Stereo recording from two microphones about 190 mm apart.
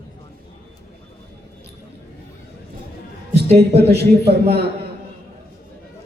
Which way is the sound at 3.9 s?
60° right (ahead or behind).